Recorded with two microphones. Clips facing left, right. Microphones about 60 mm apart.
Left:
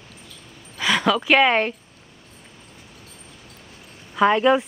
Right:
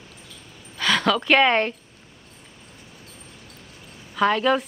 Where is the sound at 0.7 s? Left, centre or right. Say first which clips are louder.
Left 1 dB; centre.